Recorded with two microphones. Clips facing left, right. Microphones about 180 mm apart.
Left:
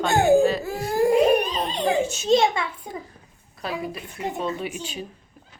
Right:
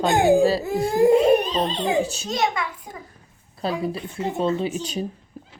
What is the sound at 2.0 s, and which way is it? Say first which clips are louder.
Speech: left 1 dB; 35° right (ahead or behind).